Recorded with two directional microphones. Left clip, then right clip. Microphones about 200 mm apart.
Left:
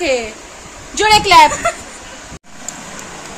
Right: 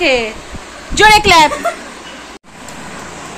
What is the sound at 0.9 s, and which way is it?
Speech, 10° right (ahead or behind).